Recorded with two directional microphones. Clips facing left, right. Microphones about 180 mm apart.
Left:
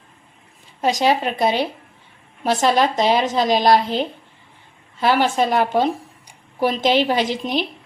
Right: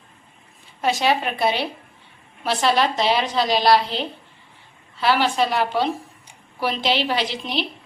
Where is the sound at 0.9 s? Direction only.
40° left (ahead or behind).